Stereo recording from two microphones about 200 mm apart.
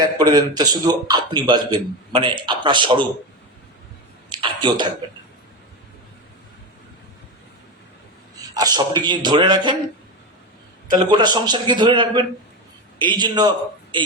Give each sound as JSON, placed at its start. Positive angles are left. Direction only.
{"t": 0.0, "sound": "a man's voice", "side_deg": -20}
{"t": 4.3, "sound": "a sound", "side_deg": -25}
{"t": 8.4, "sound": "a man's voice", "side_deg": -20}
{"t": 10.9, "sound": "a man's voice", "side_deg": -20}